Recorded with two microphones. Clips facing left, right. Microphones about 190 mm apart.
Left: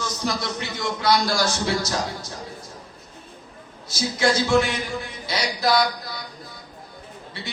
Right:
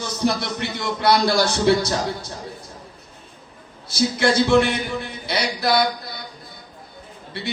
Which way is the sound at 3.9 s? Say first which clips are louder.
Right 3 dB; 60° right (ahead or behind).